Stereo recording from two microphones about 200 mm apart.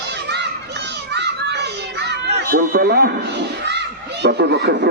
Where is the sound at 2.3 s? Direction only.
50° right (ahead or behind).